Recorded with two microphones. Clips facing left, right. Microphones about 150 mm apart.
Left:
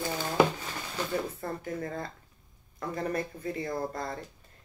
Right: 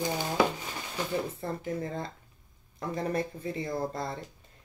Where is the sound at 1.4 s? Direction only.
25° right (ahead or behind).